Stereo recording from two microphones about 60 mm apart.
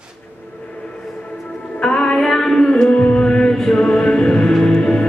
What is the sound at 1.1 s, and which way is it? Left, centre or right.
Music, centre.